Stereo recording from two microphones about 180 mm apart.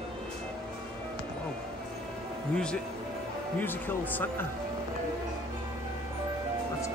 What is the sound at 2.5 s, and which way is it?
Speech, 5° left (ahead or behind).